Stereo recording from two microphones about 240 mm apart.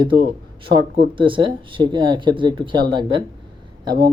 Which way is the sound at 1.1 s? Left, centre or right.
Right.